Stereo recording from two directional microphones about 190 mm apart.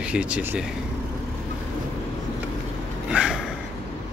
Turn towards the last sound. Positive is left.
turn(degrees=-5)  # may be behind; listen again after turning